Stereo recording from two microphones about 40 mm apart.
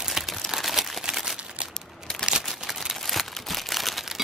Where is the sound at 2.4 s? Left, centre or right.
Centre.